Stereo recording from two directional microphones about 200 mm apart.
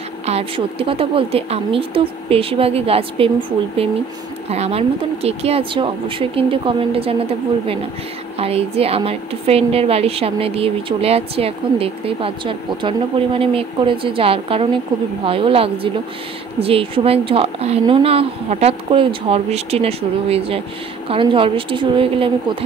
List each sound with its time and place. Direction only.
0.3 s a woman's voice: 30° right (ahead or behind)